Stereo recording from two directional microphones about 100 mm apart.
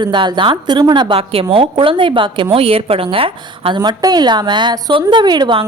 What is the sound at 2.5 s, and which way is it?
A woman's voice, 70° right (ahead or behind).